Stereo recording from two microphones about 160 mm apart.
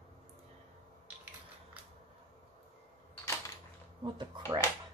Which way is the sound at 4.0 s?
30° right (ahead or behind).